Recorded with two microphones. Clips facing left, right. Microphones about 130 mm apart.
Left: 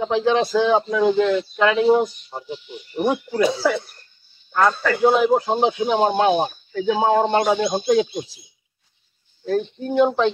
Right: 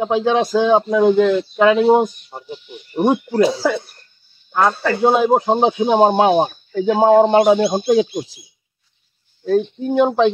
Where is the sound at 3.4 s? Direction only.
30° right (ahead or behind).